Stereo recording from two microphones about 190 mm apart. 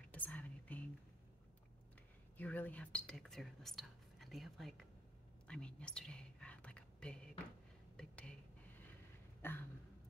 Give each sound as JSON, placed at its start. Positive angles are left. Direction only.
{"t": 0.1, "sound": "whispering", "side_deg": 10}
{"t": 2.3, "sound": "speech", "side_deg": 10}
{"t": 8.0, "sound": "whispering", "side_deg": 5}
{"t": 9.4, "sound": "a sound", "side_deg": 10}